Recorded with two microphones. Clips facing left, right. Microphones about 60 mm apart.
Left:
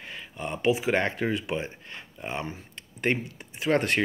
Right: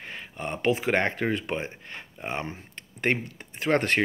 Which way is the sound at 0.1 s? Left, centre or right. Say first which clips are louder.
Even; right.